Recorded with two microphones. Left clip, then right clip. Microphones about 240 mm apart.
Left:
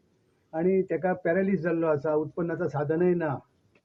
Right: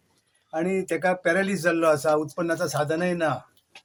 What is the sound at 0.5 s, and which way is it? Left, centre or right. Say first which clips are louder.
Speech: even; centre.